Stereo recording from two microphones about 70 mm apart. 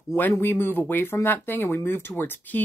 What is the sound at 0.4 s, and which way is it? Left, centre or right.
Speech, left.